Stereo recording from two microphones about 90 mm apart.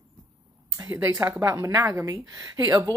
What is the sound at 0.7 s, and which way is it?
Speech, 30° right (ahead or behind).